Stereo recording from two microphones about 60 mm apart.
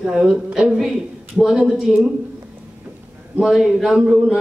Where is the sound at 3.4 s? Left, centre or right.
Centre.